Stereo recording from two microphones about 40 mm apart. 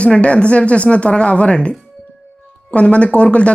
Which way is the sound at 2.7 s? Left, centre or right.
Left.